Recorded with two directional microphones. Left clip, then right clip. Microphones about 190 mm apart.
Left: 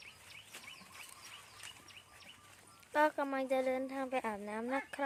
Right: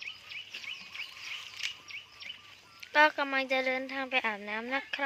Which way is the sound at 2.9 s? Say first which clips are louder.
Right 7 dB; 5° left (ahead or behind).